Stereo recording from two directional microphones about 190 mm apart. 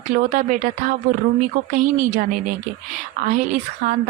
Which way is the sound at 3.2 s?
45° right (ahead or behind).